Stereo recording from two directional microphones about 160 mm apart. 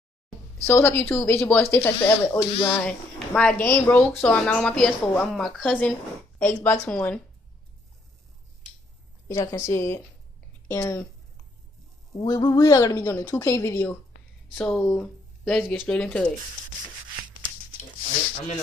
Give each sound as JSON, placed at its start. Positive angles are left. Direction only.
{"t": 0.7, "sound": "a woman's voice", "side_deg": 15}
{"t": 2.5, "sound": "speech", "side_deg": 35}
{"t": 3.3, "sound": "a woman's voice", "side_deg": 5}
{"t": 9.3, "sound": "a woman's voice", "side_deg": 20}
{"t": 12.3, "sound": "a woman's voice", "side_deg": 25}